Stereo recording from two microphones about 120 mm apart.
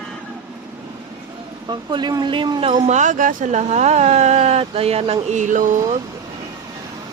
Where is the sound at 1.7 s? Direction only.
40° right (ahead or behind).